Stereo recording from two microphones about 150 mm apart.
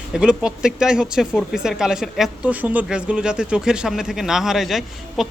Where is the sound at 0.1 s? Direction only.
5° right (ahead or behind).